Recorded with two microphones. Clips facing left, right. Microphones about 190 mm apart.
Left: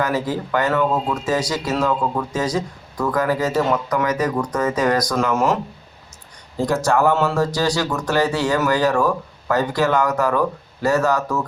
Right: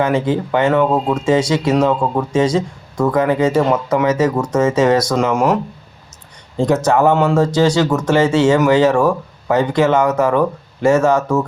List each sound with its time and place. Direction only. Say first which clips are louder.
0.0 s speech: right 5 dB; 25° right (ahead or behind)
0.9 s speech: right 5 dB; 35° right (ahead or behind)
1.1 s speech: right 7 dB; 25° right (ahead or behind)
6.6 s speech: right 4 dB; 20° right (ahead or behind)